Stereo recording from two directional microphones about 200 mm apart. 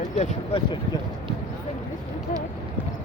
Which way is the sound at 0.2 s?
30° left (ahead or behind).